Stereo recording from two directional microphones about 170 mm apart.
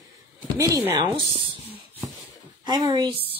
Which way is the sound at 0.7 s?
20° right (ahead or behind).